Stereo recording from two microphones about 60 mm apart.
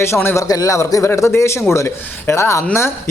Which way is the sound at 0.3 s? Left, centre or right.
Left.